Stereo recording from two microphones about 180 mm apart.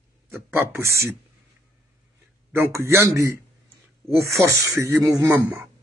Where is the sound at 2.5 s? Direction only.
15° right (ahead or behind).